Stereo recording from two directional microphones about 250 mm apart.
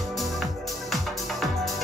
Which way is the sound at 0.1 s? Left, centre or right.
Centre.